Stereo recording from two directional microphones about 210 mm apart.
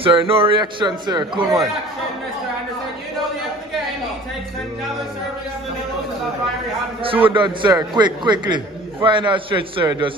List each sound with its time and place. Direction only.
0.0 s a man's voice: 25° right (ahead or behind)
7.0 s a man's voice: 25° right (ahead or behind)